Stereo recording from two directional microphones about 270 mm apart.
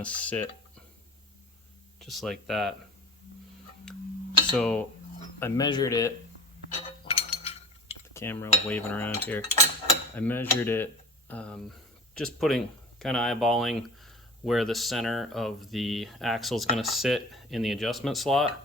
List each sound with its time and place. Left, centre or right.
0.0 s speech: centre
2.0 s speech: centre
3.9 s tick-tock: centre
4.5 s speech: centre
5.4 s cutlery: centre
8.1 s cutlery: centre
11.3 s speech: centre